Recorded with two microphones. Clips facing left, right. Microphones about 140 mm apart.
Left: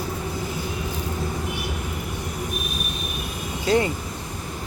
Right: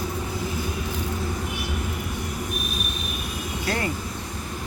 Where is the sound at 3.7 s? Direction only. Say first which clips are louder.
Left 9 dB; 20° left (ahead or behind).